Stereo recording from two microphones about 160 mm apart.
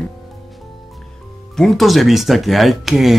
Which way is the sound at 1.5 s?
Centre (ahead or behind).